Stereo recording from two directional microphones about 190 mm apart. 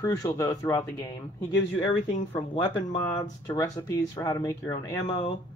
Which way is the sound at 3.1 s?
20° left (ahead or behind).